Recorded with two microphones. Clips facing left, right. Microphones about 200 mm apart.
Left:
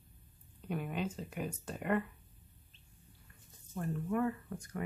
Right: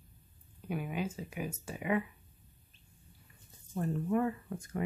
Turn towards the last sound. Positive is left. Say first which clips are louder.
# right 3 dB
turn(degrees=-25)  # may be behind; listen again after turning